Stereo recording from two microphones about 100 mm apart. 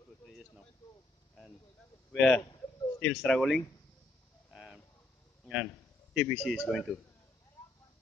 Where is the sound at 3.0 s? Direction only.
5° left (ahead or behind).